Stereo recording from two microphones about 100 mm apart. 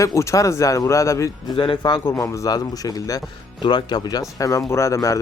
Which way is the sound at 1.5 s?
55° left (ahead or behind).